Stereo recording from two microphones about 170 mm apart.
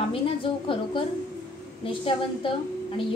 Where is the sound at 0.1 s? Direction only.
30° left (ahead or behind).